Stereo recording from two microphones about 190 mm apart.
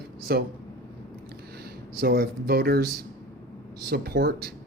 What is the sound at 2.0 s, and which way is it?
Speech, 55° right (ahead or behind).